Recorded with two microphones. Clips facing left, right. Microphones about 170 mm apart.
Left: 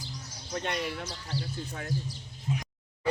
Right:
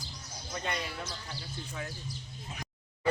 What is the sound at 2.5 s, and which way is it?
Speech, centre (ahead or behind).